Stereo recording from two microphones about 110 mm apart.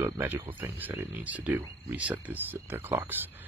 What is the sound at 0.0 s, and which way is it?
Speech, 20° right (ahead or behind).